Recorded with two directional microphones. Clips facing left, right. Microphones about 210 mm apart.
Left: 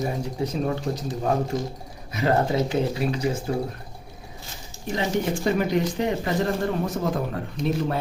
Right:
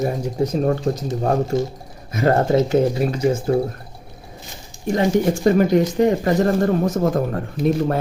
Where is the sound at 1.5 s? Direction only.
25° right (ahead or behind).